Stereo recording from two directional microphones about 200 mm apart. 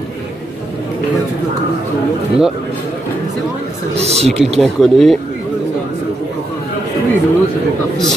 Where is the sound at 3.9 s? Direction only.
30° right (ahead or behind).